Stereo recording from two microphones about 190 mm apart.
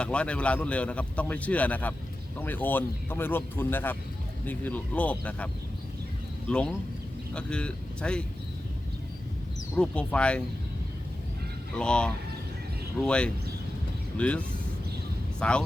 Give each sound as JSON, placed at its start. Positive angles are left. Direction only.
{"t": 0.0, "sound": "a man's voice", "side_deg": 5}
{"t": 6.5, "sound": "speech", "side_deg": 5}
{"t": 9.7, "sound": "speech", "side_deg": 5}
{"t": 11.7, "sound": "a man's voice", "side_deg": 5}